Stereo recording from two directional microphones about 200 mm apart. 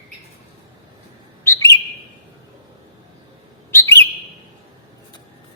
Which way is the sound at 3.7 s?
15° left (ahead or behind).